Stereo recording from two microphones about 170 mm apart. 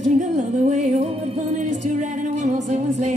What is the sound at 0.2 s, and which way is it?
Music, 45° right (ahead or behind).